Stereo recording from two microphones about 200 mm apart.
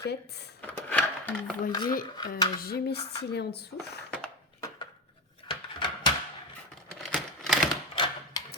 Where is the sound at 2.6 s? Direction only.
50° left (ahead or behind).